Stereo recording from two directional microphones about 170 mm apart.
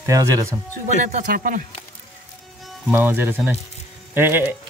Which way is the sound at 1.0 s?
50° right (ahead or behind).